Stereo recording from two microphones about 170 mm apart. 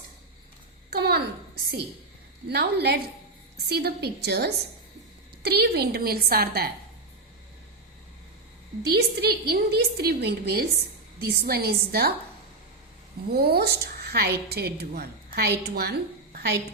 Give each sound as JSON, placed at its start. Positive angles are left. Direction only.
{"t": 0.9, "sound": "a woman's voice", "side_deg": -70}
{"t": 2.5, "sound": "a woman's voice", "side_deg": -70}
{"t": 8.8, "sound": "a woman's voice", "side_deg": -70}
{"t": 13.3, "sound": "a woman's voice", "side_deg": -65}